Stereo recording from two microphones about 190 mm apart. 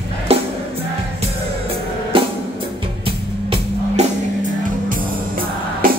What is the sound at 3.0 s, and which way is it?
Music, 30° right (ahead or behind).